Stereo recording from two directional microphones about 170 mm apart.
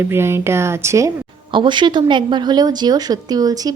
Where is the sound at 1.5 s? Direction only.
30° right (ahead or behind).